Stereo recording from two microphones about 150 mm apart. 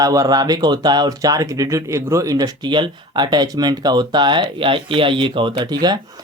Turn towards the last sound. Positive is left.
turn(degrees=-30)  # may be behind; listen again after turning